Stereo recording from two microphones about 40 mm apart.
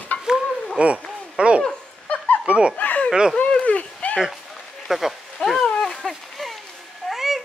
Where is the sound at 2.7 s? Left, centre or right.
Left.